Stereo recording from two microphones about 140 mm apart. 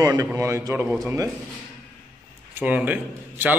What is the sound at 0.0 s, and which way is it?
Speech, 15° right (ahead or behind).